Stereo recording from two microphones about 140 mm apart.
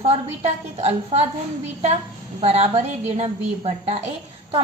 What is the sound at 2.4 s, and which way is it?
A woman's voice, 45° right (ahead or behind).